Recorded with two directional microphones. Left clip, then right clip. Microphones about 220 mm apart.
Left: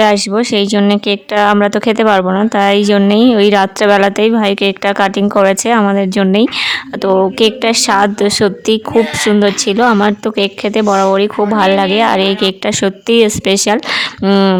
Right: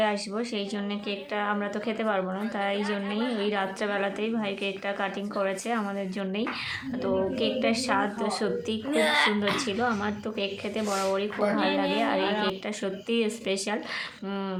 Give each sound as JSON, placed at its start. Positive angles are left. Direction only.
{"t": 0.0, "sound": "speech", "side_deg": 55}